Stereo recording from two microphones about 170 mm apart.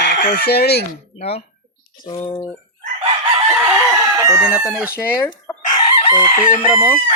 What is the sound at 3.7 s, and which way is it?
Chicken, 15° right (ahead or behind).